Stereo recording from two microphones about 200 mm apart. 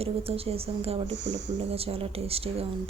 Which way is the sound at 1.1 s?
65° right (ahead or behind).